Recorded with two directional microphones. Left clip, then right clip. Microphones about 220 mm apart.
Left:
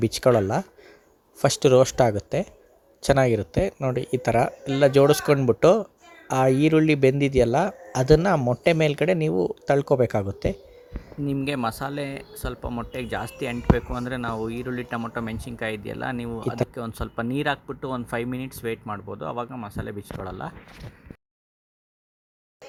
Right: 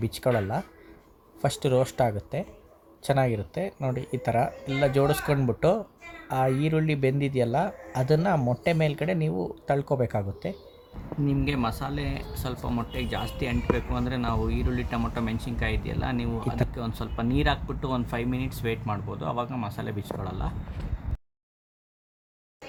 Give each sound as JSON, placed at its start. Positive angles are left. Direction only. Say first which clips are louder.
{"t": 0.0, "sound": "speech", "louder": "left 7 dB", "side_deg": 30}